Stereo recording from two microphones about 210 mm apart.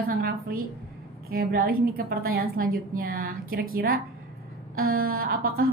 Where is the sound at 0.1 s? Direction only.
45° right (ahead or behind).